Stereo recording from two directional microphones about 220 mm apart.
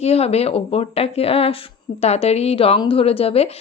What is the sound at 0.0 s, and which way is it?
Speech, 30° left (ahead or behind).